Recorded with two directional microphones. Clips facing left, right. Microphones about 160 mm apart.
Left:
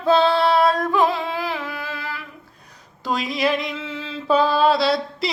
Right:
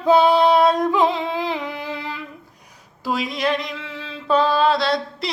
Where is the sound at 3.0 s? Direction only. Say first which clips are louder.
Even; centre (ahead or behind).